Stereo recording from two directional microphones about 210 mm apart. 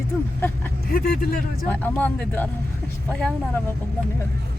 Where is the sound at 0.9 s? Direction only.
45° left (ahead or behind).